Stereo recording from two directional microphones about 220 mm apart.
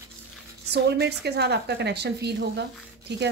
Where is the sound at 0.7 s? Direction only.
50° right (ahead or behind).